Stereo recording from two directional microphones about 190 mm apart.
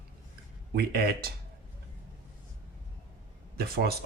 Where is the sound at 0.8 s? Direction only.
55° right (ahead or behind).